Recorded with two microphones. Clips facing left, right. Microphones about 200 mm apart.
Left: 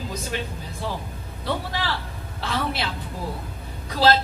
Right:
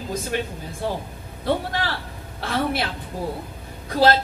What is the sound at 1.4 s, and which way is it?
Speech, 50° right (ahead or behind).